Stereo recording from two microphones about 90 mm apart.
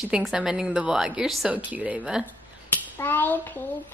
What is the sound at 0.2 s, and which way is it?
A woman's voice, 5° right (ahead or behind).